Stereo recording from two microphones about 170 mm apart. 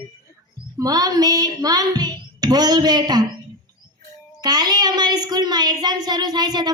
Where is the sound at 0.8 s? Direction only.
20° right (ahead or behind).